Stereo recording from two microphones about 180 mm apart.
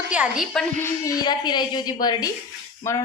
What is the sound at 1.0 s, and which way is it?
A woman's voice, 20° left (ahead or behind).